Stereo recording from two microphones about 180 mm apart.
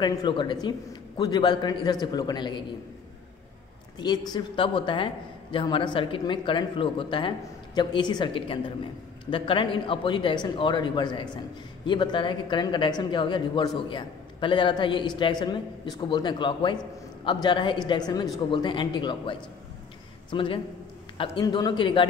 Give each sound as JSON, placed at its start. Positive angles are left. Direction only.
{"t": 0.0, "sound": "speech", "side_deg": 25}
{"t": 4.3, "sound": "a man's voice", "side_deg": 25}